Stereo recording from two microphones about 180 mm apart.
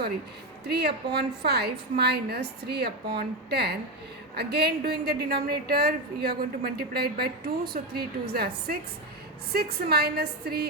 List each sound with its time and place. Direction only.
0.7 s a woman's voice: 65° right (ahead or behind)